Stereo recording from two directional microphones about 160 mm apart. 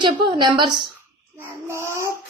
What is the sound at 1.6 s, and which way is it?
Child singing, 15° right (ahead or behind).